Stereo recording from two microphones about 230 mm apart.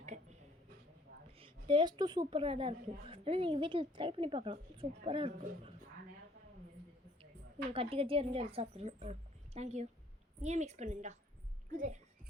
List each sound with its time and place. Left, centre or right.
0.0 s a sound: right
1.4 s a woman's voice: right
7.7 s a woman's voice: right